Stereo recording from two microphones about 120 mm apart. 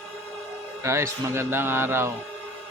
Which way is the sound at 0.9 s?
25° right (ahead or behind).